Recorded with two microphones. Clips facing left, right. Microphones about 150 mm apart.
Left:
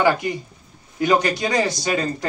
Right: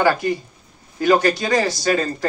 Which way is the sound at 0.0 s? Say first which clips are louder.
Right 1 dB; 20° left (ahead or behind).